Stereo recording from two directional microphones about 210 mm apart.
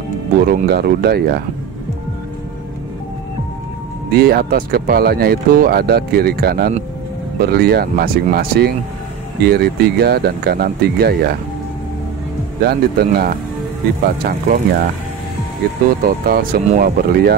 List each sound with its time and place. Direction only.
0.4 s speech: 45° right (ahead or behind)
4.1 s speech: 45° right (ahead or behind)
12.6 s speech: 45° right (ahead or behind)
16.0 s speech: 45° right (ahead or behind)